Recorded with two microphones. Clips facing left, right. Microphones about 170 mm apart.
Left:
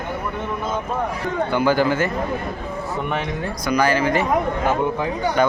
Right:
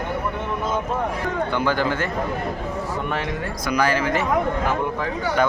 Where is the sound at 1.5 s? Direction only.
5° left (ahead or behind).